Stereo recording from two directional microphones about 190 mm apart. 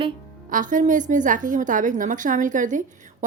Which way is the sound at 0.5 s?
45° right (ahead or behind).